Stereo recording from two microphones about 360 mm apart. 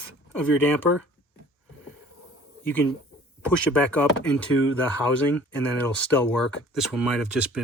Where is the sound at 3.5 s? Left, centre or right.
Centre.